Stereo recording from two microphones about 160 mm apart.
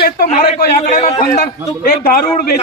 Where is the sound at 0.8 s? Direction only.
45° left (ahead or behind).